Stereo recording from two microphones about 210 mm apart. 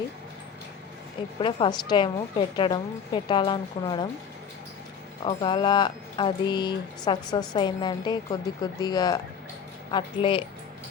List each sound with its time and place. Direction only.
1.4 s speech: 25° left (ahead or behind)
5.2 s speech: 25° left (ahead or behind)